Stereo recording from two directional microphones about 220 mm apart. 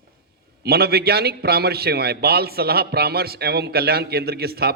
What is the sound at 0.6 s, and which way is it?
A man's voice, 45° right (ahead or behind).